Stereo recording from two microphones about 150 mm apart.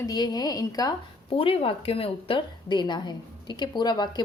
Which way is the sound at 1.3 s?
40° left (ahead or behind).